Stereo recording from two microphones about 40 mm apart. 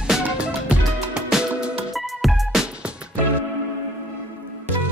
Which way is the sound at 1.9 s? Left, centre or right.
Centre.